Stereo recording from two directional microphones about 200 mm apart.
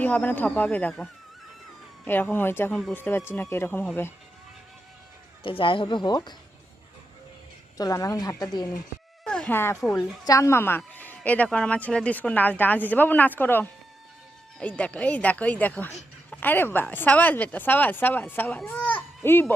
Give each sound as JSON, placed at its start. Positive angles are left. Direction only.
{"t": 0.0, "sound": "a woman's voice", "side_deg": 5}
{"t": 2.0, "sound": "a woman's voice", "side_deg": 10}
{"t": 5.4, "sound": "speech", "side_deg": 25}
{"t": 7.8, "sound": "a woman's voice", "side_deg": 15}
{"t": 9.2, "sound": "a woman's voice", "side_deg": 5}
{"t": 18.6, "sound": "children playing", "side_deg": 10}